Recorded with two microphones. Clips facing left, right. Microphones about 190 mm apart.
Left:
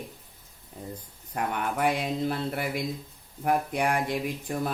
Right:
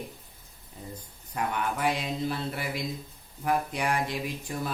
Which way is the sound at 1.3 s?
55° left (ahead or behind).